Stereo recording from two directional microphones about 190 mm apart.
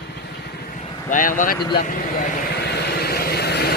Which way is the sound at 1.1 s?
45° left (ahead or behind).